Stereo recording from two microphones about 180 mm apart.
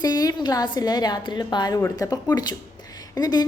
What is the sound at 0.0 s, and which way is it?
A woman's voice, 20° left (ahead or behind).